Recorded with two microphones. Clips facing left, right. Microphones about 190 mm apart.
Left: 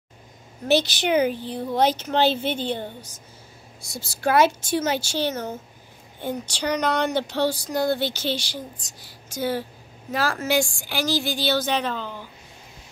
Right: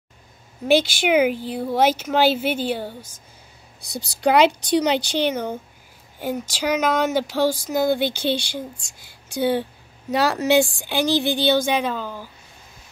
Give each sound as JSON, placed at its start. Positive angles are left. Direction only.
{"t": 0.7, "sound": "speech", "side_deg": -10}
{"t": 8.3, "sound": "a woman's voice", "side_deg": -55}
{"t": 10.3, "sound": "speech", "side_deg": -20}